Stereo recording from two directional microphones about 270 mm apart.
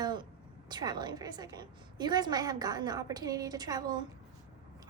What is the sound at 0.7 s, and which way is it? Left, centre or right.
A woman's voice, centre.